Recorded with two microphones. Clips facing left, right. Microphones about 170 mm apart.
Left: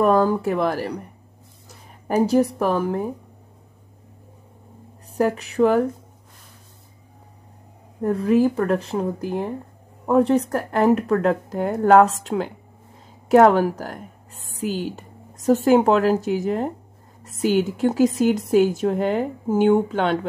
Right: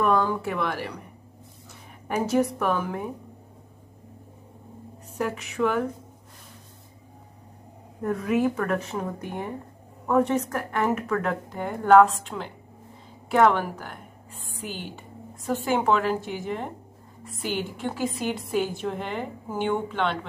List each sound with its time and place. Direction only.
0.0 s a woman's voice: 40° left (ahead or behind)
5.1 s a woman's voice: 35° left (ahead or behind)
8.0 s a woman's voice: 35° left (ahead or behind)
10.0 s a woman's voice: 35° left (ahead or behind)